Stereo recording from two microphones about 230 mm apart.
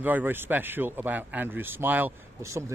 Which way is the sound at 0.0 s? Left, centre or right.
Centre.